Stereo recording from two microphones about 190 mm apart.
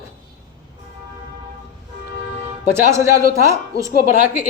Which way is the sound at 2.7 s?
15° right (ahead or behind).